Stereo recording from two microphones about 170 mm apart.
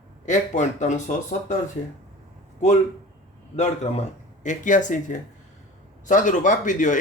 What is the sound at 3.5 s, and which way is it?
A man's voice, 40° left (ahead or behind).